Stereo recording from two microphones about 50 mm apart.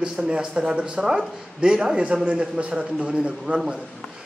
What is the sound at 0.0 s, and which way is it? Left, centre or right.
A man's voice, centre.